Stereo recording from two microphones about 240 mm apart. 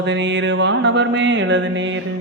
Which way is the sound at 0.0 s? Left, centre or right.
Right.